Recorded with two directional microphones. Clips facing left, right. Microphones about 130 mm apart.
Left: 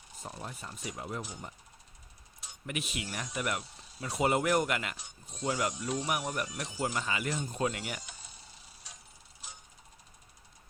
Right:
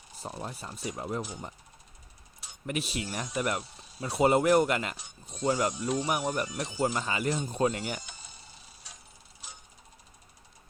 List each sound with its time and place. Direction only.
0.2 s speech: 35° right (ahead or behind)
2.6 s speech: 35° right (ahead or behind)